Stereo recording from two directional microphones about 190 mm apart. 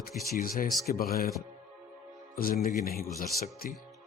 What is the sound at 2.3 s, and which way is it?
Speech, 50° left (ahead or behind).